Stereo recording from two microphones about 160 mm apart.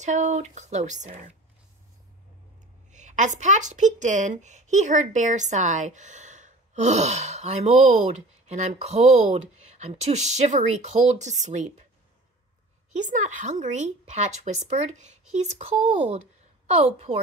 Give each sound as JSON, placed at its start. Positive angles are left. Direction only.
{"t": 0.0, "sound": "a woman's voice", "side_deg": -50}
{"t": 2.9, "sound": "a woman's voice", "side_deg": -50}
{"t": 12.9, "sound": "a woman's voice", "side_deg": -50}